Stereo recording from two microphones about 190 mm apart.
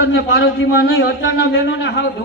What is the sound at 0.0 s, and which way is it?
A man's voice, 60° left (ahead or behind).